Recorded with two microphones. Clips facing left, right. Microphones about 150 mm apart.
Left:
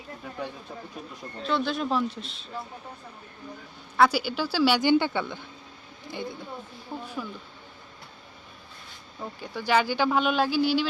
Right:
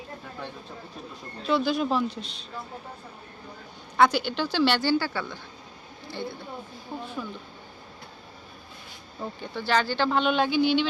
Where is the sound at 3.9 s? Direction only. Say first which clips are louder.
Right 1 dB; 5° left (ahead or behind).